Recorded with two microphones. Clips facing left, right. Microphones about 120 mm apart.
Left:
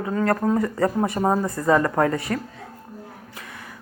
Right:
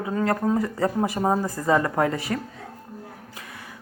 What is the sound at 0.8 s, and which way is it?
Speech, 30° left (ahead or behind).